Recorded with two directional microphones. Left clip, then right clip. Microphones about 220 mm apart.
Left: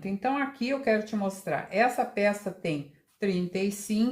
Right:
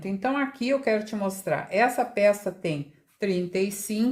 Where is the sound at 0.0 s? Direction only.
40° right (ahead or behind).